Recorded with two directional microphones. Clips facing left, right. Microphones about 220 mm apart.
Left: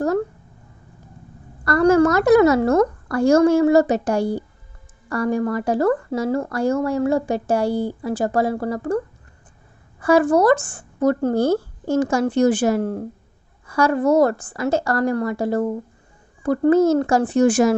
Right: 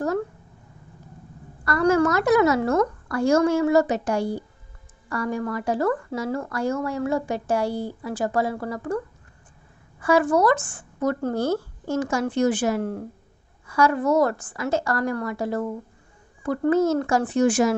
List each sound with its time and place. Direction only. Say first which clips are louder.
1.6 s speech: left 5 dB; 35° left (ahead or behind)
10.0 s speech: left 4 dB; 40° left (ahead or behind)